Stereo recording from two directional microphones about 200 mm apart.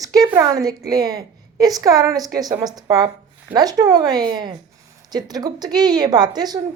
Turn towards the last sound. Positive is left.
turn(degrees=-20)  # may be behind; listen again after turning